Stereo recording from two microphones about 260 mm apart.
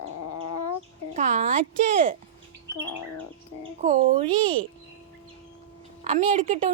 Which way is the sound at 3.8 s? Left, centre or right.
Right.